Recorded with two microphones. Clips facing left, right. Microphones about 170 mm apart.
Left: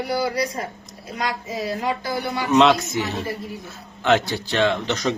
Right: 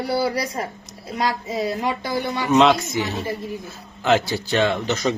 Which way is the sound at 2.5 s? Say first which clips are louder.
Even; centre (ahead or behind).